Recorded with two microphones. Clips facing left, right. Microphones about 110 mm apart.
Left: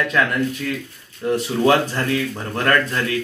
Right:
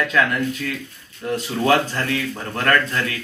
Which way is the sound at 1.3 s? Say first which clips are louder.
Left 2 dB; 15° left (ahead or behind).